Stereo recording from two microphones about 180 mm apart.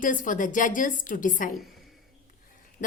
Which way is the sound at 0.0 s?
45° left (ahead or behind).